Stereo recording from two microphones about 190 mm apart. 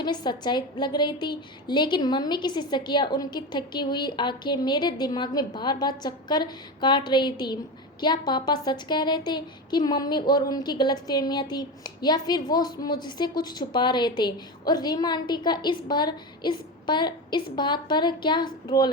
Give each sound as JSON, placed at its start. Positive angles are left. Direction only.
{"t": 0.0, "sound": "a woman's voice", "side_deg": 25}